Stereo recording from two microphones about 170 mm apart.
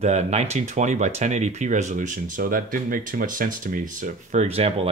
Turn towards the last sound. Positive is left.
turn(degrees=-35)  # may be behind; listen again after turning